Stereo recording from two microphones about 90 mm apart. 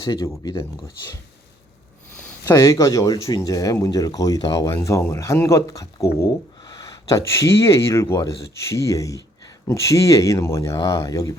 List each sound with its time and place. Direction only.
0.0 s speech: 45° left (ahead or behind)
2.5 s speech: 35° left (ahead or behind)
6.6 s speech: 45° left (ahead or behind)